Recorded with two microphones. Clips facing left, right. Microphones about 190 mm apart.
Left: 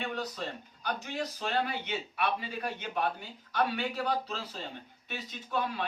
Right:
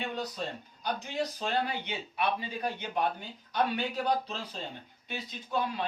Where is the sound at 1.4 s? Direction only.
15° right (ahead or behind).